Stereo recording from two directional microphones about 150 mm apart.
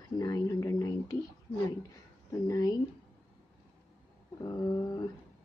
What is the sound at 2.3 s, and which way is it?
Speech, 20° left (ahead or behind).